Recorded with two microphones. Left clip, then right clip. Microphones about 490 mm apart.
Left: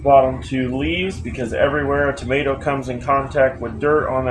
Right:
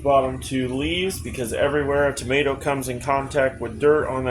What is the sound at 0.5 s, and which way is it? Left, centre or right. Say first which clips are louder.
Speech: left 3 dB; right.